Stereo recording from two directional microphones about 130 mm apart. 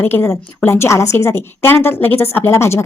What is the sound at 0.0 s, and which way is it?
A woman's voice, 20° left (ahead or behind).